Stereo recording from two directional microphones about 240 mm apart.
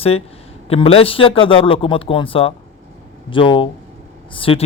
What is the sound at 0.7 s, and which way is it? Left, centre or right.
A man's voice, left.